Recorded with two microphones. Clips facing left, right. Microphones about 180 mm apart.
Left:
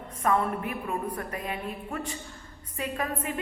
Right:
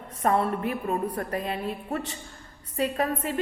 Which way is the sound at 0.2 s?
35° right (ahead or behind).